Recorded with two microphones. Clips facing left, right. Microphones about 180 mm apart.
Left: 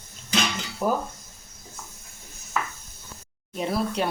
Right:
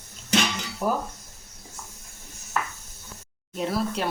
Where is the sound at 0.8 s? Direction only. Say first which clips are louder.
Left 1 dB; centre (ahead or behind).